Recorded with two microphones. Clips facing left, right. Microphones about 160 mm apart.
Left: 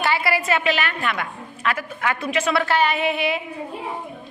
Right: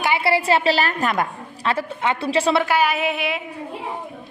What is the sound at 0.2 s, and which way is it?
A woman's voice, 30° right (ahead or behind).